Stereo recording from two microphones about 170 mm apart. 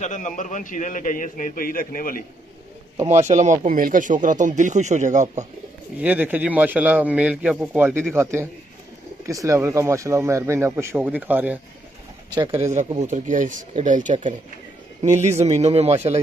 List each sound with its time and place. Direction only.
0.0 s a man's voice: 45° left (ahead or behind)
3.1 s speech: 45° right (ahead or behind)
5.9 s speech: 10° right (ahead or behind)
12.4 s a man's voice: 35° right (ahead or behind)
13.0 s a man's voice: 50° right (ahead or behind)